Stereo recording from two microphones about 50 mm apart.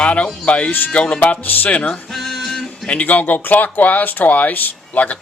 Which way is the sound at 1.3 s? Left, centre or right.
Left.